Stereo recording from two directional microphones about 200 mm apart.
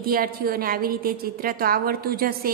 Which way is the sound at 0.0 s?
50° right (ahead or behind).